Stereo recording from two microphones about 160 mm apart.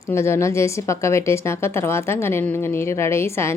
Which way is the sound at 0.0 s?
15° left (ahead or behind).